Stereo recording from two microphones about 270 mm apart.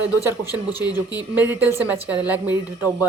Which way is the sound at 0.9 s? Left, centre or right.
Centre.